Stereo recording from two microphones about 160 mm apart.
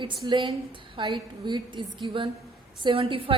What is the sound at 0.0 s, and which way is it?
A woman's voice, 30° right (ahead or behind).